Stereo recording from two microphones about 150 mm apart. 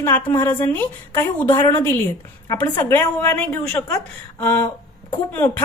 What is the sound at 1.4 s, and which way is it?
A woman's voice, 25° left (ahead or behind).